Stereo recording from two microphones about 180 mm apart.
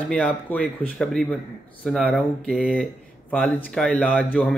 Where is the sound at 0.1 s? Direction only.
10° left (ahead or behind).